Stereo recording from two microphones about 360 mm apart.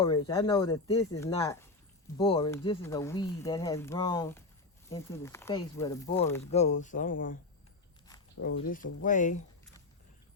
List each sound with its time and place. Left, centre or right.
0.0 s speech: centre
8.4 s speech: left